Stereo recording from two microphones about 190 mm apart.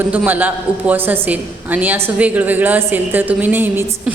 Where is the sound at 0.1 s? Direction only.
10° right (ahead or behind).